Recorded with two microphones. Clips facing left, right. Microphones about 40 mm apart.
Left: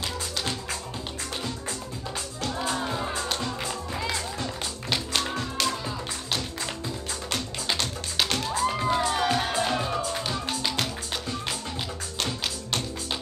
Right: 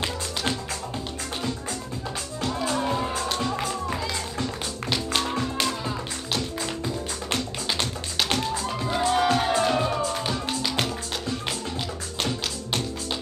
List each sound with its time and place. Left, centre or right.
2.8 s music: centre
5.6 s music: centre
8.5 s music: centre
8.9 s music: centre